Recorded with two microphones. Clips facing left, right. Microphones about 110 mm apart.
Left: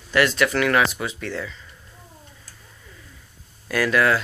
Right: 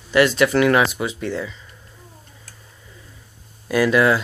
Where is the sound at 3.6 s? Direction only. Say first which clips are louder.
Right 4 dB; 15° right (ahead or behind).